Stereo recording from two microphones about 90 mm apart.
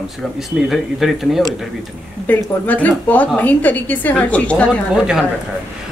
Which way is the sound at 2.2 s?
20° left (ahead or behind).